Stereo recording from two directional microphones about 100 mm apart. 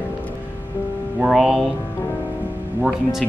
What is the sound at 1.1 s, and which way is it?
Speech, 15° right (ahead or behind).